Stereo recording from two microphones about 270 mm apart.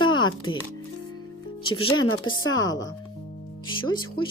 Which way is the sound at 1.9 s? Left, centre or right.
Left.